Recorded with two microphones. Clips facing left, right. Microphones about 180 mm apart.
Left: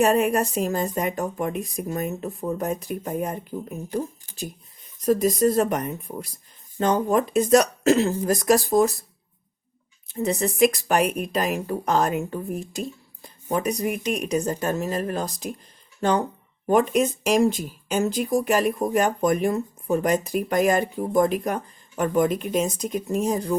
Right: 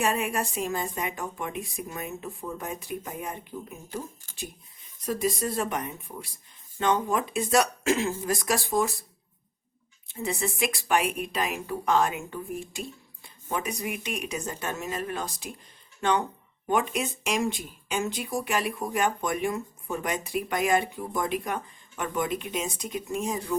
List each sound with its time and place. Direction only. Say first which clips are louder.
0.0 s speech: left 8 dB; 40° left (ahead or behind)
5.0 s speech: left 9 dB; 40° left (ahead or behind)
10.1 s speech: left 6 dB; 40° left (ahead or behind)